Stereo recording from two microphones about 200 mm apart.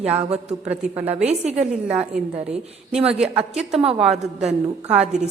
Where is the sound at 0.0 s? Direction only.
30° right (ahead or behind).